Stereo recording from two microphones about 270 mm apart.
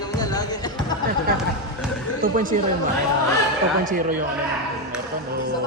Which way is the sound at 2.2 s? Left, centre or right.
Right.